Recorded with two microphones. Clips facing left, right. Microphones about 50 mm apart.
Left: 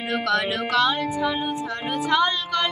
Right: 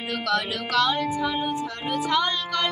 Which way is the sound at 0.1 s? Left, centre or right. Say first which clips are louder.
Left 3 dB; left.